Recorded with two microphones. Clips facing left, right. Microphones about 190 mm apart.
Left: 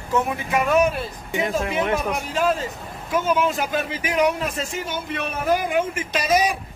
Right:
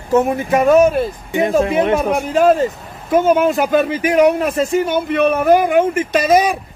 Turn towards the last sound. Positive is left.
turn(degrees=-55)  # may be behind; listen again after turning